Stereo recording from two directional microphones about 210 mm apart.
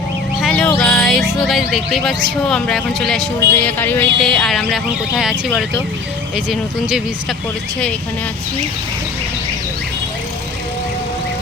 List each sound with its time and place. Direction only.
0.4 s music: 5° left (ahead or behind)
2.5 s speech: 5° left (ahead or behind)